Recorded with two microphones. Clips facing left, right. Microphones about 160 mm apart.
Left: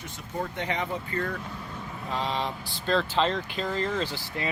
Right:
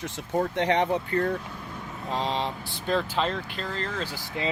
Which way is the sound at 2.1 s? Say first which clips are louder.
Right 2 dB; 35° right (ahead or behind).